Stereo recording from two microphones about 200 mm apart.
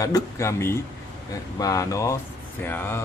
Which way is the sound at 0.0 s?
15° left (ahead or behind).